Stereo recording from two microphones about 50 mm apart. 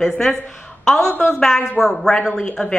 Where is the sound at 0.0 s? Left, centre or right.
Centre.